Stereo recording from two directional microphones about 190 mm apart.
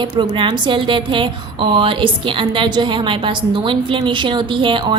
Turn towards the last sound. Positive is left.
turn(degrees=-25)  # may be behind; listen again after turning